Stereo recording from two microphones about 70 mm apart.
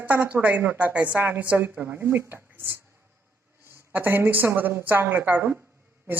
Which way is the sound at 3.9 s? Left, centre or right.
Right.